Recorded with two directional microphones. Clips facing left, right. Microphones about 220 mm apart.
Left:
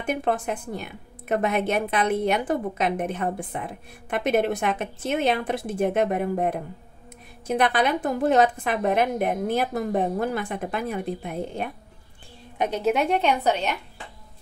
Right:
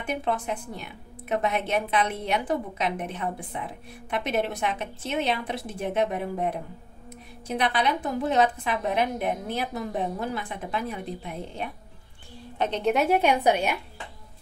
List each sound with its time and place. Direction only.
0.0 s a woman's voice: 50° left (ahead or behind)
12.5 s a woman's voice: 10° left (ahead or behind); by 13.7 s 10° right (ahead or behind)